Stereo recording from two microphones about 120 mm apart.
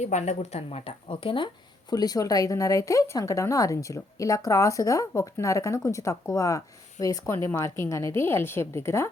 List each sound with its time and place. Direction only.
0.0 s speech: 75° left (ahead or behind)
1.0 s speech: 45° left (ahead or behind)
1.9 s speech: 35° left (ahead or behind)